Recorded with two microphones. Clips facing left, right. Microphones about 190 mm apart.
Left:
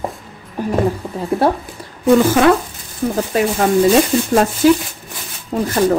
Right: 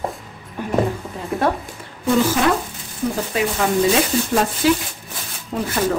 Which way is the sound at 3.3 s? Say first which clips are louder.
Left 6 dB; 45° left (ahead or behind).